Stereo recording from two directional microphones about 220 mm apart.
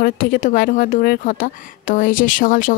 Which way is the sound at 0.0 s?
40° left (ahead or behind).